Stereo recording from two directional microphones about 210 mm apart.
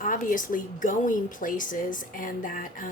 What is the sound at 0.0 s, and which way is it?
A woman's voice, 40° left (ahead or behind).